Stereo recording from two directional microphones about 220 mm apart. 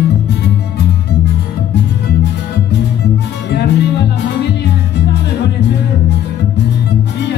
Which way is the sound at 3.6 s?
50° left (ahead or behind).